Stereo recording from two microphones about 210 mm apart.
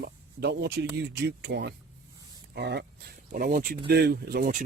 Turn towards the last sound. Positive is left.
turn(degrees=-40)  # may be behind; listen again after turning